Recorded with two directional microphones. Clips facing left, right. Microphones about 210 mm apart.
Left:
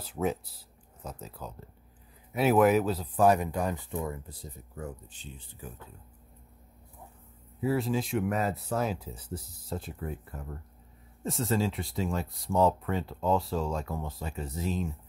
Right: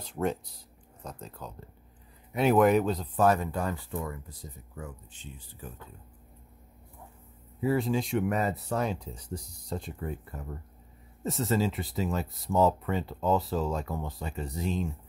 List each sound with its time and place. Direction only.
0.0 s speech: 5° left (ahead or behind); by 4.4 s 25° left (ahead or behind)
5.1 s speech: 35° left (ahead or behind)
7.6 s speech: centre (ahead or behind)